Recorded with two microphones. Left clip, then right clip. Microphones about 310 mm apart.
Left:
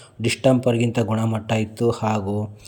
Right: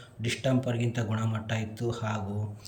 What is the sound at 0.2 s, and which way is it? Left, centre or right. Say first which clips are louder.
Speech: left 11 dB; centre.